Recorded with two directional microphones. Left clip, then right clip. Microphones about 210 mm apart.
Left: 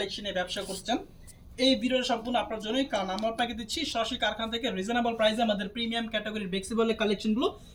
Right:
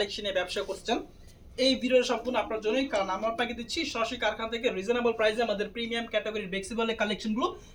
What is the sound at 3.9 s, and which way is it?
Speech, 15° right (ahead or behind).